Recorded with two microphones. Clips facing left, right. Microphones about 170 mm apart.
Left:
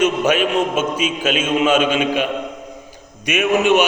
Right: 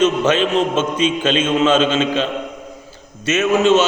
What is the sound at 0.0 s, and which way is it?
A man's voice, 10° left (ahead or behind).